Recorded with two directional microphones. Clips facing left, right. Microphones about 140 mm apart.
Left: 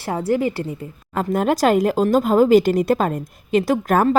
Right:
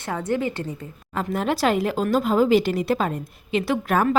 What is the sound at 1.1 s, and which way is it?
A woman's voice, 45° left (ahead or behind).